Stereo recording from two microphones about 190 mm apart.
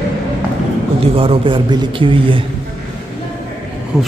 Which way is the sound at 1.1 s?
30° right (ahead or behind).